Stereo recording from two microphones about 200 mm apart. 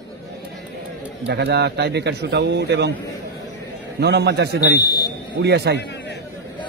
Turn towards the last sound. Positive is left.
turn(degrees=60)  # may be behind; listen again after turning